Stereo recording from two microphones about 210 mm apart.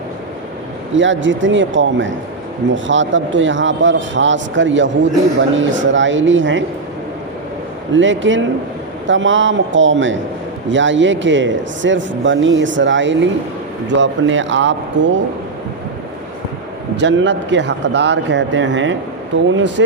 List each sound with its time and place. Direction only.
0.9 s a man's voice: 60° right (ahead or behind)
7.9 s a man's voice: 60° right (ahead or behind)
17.0 s a man's voice: 55° right (ahead or behind)